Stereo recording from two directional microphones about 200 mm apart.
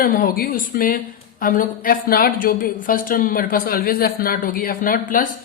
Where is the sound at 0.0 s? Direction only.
45° left (ahead or behind).